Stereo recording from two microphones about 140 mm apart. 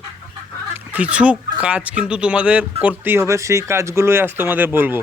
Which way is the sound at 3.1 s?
20° right (ahead or behind).